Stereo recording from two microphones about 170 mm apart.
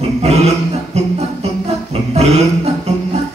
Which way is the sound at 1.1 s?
40° right (ahead or behind).